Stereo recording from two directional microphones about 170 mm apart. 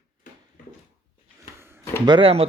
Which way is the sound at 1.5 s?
15° right (ahead or behind).